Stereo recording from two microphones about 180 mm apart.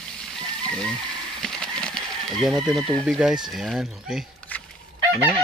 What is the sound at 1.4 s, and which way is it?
Bird, 5° left (ahead or behind).